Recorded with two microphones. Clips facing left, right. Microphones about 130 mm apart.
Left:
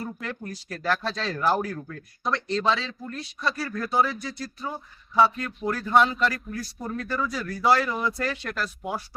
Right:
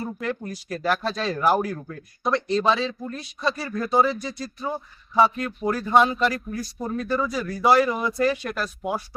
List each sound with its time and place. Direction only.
0.0 s speech: 15° right (ahead or behind)